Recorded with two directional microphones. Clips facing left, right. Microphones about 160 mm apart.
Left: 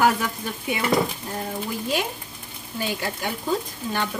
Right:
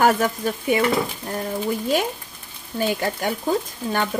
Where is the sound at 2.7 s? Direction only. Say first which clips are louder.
Right 5 dB; 50° right (ahead or behind).